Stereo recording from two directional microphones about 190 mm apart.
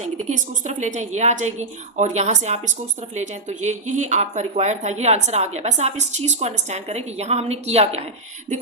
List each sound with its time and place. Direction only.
0.3 s speech: 40° right (ahead or behind)